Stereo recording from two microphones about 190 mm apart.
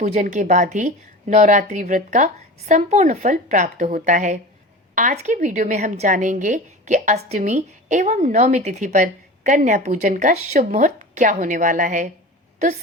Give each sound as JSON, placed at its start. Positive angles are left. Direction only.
{"t": 0.0, "sound": "a woman's voice", "side_deg": -40}